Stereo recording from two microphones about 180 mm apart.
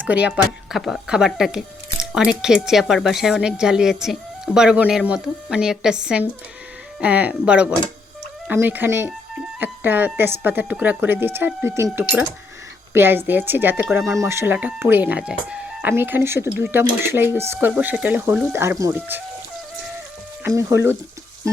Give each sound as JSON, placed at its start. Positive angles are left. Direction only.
{"t": 0.3, "sound": "speech", "side_deg": 0}
{"t": 20.4, "sound": "speech", "side_deg": -15}